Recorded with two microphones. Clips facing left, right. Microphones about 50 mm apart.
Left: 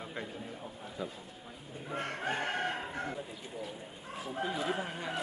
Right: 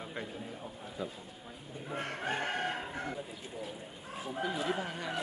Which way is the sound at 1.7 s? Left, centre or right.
Centre.